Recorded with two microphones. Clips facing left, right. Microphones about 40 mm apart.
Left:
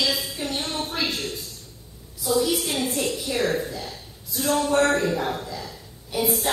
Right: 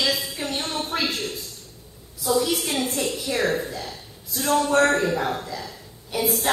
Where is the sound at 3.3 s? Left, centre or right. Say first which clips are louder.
Right 1 dB; centre.